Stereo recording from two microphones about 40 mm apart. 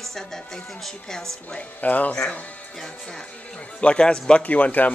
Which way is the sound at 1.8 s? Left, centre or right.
Left.